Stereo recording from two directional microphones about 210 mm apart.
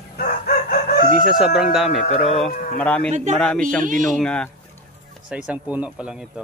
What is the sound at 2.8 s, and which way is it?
Speech, 5° left (ahead or behind).